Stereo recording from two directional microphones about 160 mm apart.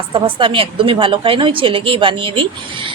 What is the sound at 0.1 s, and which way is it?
A woman's voice, 35° right (ahead or behind).